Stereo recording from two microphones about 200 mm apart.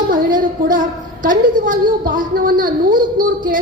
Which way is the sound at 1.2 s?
45° right (ahead or behind).